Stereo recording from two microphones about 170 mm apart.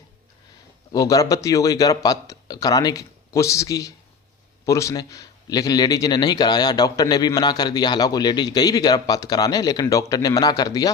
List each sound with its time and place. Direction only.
0.9 s a man's voice: 20° left (ahead or behind)